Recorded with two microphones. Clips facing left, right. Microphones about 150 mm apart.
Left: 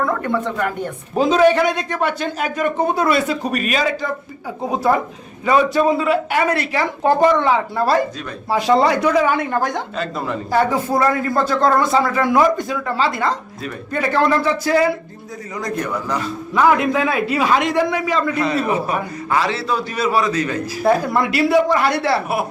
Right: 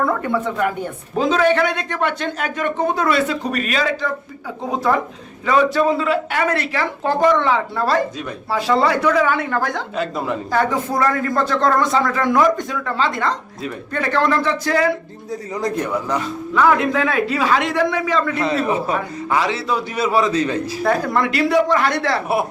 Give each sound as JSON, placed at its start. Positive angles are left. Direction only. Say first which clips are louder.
{"t": 0.0, "sound": "a woman's voice", "louder": "even", "side_deg": -5}
{"t": 1.1, "sound": "a man's voice", "louder": "left 3 dB", "side_deg": 10}
{"t": 5.7, "sound": "a man's voice", "louder": "left 1 dB", "side_deg": 10}
{"t": 10.0, "sound": "a woman's voice", "louder": "right 4 dB", "side_deg": -15}
{"t": 10.5, "sound": "a man's voice", "louder": "left 3 dB", "side_deg": 10}
{"t": 15.9, "sound": "a man's voice", "louder": "right 1 dB", "side_deg": -20}
{"t": 16.6, "sound": "a man's voice", "louder": "left 1 dB", "side_deg": 15}
{"t": 19.3, "sound": "a man's voice", "louder": "even", "side_deg": -15}
{"t": 20.8, "sound": "a man's voice", "louder": "left 3 dB", "side_deg": 10}